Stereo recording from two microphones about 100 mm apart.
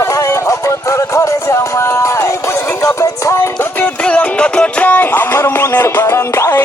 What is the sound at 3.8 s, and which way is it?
Music, 10° left (ahead or behind).